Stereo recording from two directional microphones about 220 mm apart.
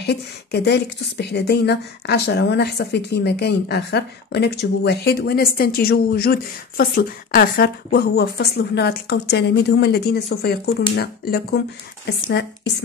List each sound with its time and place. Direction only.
0.0 s a woman's voice: 50° left (ahead or behind)